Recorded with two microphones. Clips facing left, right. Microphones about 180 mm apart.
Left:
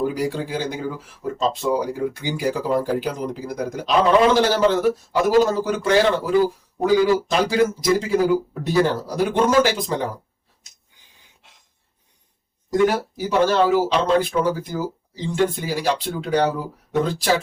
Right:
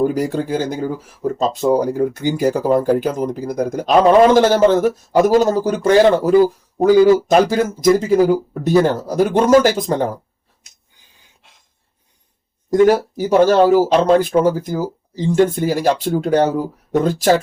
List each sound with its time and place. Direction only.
0.0 s speech: 45° right (ahead or behind)
12.7 s speech: 45° right (ahead or behind)